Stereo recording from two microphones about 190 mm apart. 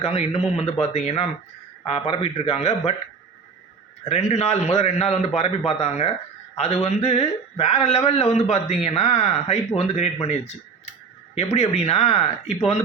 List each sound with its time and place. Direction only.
0.0 s speech: 30° left (ahead or behind)
4.0 s speech: 35° left (ahead or behind)
11.3 s speech: 35° left (ahead or behind)